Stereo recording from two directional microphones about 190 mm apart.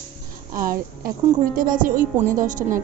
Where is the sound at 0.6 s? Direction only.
45° right (ahead or behind).